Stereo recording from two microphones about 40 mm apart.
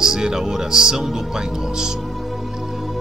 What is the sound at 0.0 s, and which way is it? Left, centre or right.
Speech, centre.